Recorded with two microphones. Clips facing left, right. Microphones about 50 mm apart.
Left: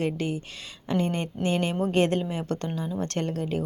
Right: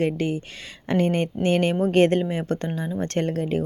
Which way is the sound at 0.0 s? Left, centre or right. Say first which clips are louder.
Right 4 dB; right.